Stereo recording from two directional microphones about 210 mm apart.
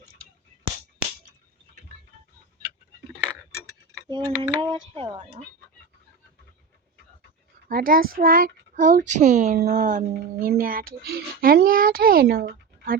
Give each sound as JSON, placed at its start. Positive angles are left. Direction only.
{"t": 4.1, "sound": "typing", "side_deg": -20}
{"t": 7.7, "sound": "speech", "side_deg": -45}